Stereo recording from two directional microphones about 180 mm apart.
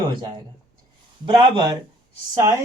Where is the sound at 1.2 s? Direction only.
25° right (ahead or behind).